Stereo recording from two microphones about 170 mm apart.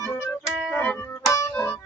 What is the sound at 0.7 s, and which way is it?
Music, 10° left (ahead or behind).